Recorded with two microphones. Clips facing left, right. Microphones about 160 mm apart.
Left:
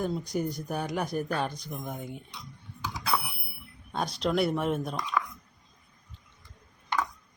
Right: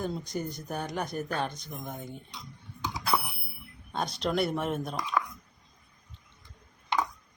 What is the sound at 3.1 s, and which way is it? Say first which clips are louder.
Bicycle bell: right 1 dB; 15° right (ahead or behind).